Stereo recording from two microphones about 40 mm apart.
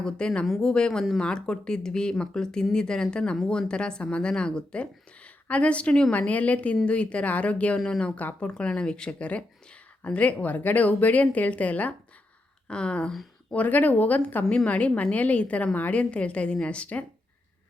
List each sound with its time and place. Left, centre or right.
0.0 s speech: left
6.1 s a woman's voice: left
7.9 s speech: left
8.1 s speech: left
8.4 s a woman's voice: left
12.6 s speech: left
13.5 s speech: left
14.5 s a woman's voice: left